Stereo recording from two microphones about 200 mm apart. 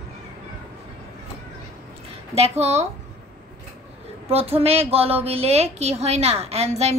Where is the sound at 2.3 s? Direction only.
30° right (ahead or behind).